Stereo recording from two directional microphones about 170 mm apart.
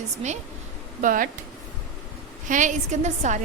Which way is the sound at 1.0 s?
55° right (ahead or behind).